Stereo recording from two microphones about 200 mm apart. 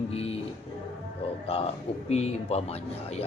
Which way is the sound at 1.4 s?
30° left (ahead or behind).